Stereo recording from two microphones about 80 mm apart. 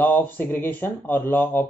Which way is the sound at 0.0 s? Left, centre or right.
Left.